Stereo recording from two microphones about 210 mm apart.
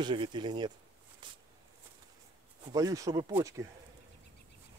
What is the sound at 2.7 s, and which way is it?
Speech, 15° right (ahead or behind).